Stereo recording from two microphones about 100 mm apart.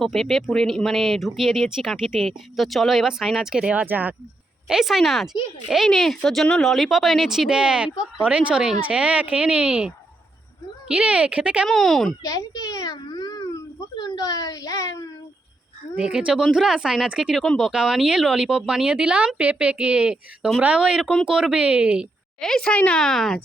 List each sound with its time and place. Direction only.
0.0 s speech: 5° left (ahead or behind); by 4.1 s 15° right (ahead or behind)
4.7 s speech: centre (ahead or behind)
11.7 s speech: centre (ahead or behind)
12.2 s a sound: 35° left (ahead or behind)
13.9 s speech: 45° left (ahead or behind)
16.0 s speech: 10° right (ahead or behind)
17.4 s speech: 5° left (ahead or behind)
17.7 s speech: 5° right (ahead or behind)
22.4 s speech: 5° left (ahead or behind)